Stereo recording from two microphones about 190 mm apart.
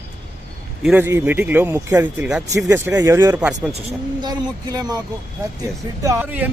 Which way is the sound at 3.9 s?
20° right (ahead or behind).